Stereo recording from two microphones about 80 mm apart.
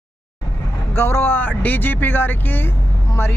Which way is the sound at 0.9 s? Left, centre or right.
Left.